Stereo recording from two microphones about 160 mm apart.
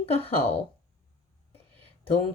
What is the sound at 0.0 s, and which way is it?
Speech, 40° left (ahead or behind).